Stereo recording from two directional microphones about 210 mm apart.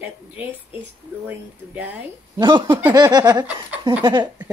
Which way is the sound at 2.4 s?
20° right (ahead or behind).